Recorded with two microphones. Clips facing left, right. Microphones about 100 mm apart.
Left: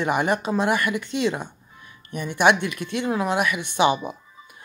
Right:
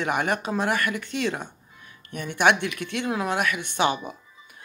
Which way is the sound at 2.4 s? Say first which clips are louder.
Left 2 dB; 5° left (ahead or behind).